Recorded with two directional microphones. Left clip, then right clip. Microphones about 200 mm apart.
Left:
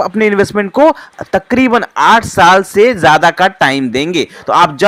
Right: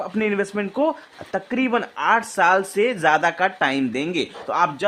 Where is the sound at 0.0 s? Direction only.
35° left (ahead or behind).